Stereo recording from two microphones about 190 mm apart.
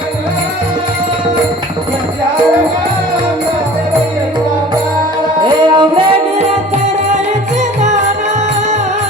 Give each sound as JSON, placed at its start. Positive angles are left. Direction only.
{"t": 5.4, "sound": "music", "side_deg": -25}